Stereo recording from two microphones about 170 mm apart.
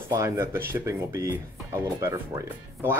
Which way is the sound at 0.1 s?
15° right (ahead or behind).